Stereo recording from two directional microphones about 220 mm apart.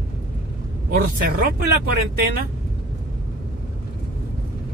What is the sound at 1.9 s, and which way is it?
Speech, 45° right (ahead or behind).